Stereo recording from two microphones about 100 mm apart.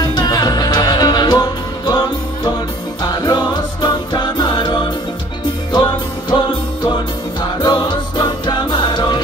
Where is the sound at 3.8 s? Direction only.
50° left (ahead or behind).